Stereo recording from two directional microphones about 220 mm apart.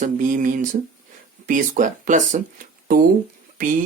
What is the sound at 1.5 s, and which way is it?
Speech, 35° right (ahead or behind).